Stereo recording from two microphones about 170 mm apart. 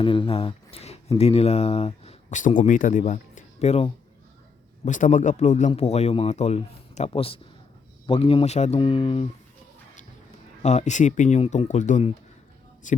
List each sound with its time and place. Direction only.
0.0 s speech: 30° left (ahead or behind)
4.9 s speech: 50° left (ahead or behind)
10.6 s speech: 40° left (ahead or behind)